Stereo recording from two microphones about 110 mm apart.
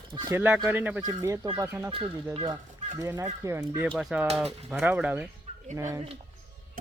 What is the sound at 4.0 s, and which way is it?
Speech, 5° right (ahead or behind).